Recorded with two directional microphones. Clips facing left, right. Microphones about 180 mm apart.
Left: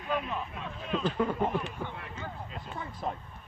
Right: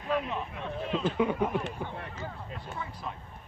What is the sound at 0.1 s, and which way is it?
Speech, 25° right (ahead or behind).